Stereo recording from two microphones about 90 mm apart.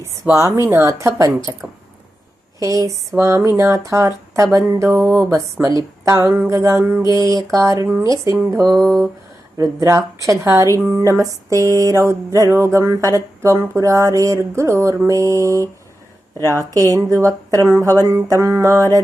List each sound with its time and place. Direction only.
0.3 s speech: 35° right (ahead or behind)
9.6 s speech: 35° right (ahead or behind)